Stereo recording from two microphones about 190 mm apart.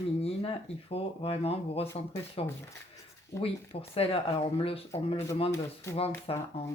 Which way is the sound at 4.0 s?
30° left (ahead or behind).